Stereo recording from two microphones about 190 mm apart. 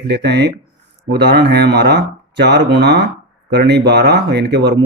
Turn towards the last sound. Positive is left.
turn(degrees=-60)  # may be behind; listen again after turning